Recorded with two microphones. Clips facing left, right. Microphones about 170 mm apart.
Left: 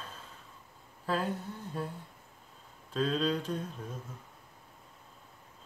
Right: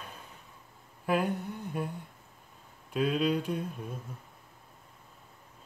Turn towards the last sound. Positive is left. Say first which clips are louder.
# right 3 dB
turn(degrees=-10)  # may be behind; listen again after turning